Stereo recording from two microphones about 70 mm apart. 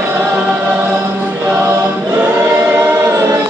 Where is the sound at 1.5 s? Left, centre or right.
Right.